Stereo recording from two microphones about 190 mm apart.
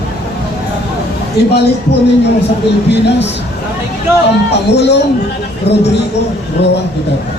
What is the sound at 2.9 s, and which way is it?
Speech, 65° left (ahead or behind).